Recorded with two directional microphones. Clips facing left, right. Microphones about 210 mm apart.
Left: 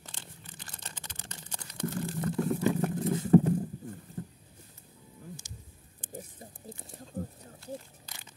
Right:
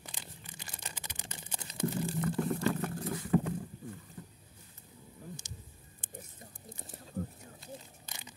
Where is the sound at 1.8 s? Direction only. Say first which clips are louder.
Even; 15° right (ahead or behind).